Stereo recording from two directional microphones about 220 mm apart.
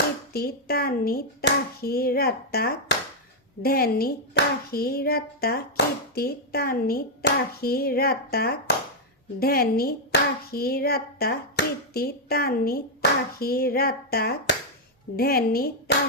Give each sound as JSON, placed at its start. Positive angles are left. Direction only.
{"t": 0.3, "sound": "speech", "side_deg": 45}